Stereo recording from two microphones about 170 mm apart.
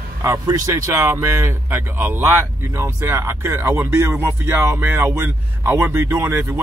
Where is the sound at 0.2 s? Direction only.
20° right (ahead or behind).